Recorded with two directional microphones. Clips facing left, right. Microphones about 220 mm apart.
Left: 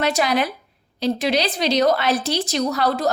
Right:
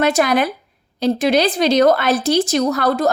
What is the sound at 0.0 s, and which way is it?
A woman's voice, 50° right (ahead or behind).